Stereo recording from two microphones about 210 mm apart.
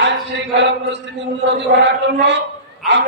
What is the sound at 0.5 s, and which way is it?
Speech, 60° right (ahead or behind).